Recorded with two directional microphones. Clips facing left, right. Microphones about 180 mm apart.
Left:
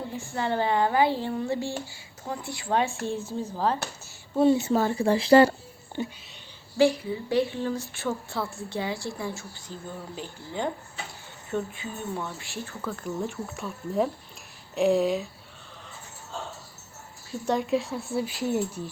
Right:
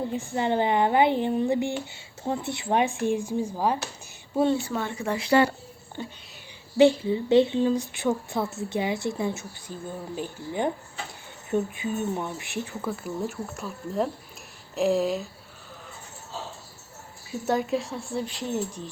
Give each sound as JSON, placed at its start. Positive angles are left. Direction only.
{"t": 0.1, "sound": "speech", "side_deg": -20}
{"t": 4.7, "sound": "speech", "side_deg": 35}
{"t": 6.7, "sound": "a woman's voice", "side_deg": -25}
{"t": 17.4, "sound": "a woman's voice", "side_deg": 0}